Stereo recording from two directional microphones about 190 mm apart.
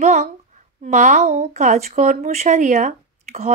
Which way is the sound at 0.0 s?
40° right (ahead or behind).